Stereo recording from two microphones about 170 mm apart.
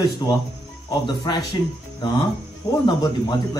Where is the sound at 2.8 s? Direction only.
25° left (ahead or behind).